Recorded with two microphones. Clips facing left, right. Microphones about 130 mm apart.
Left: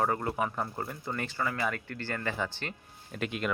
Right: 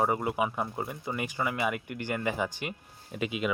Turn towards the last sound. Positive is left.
turn(degrees=-5)  # may be behind; listen again after turning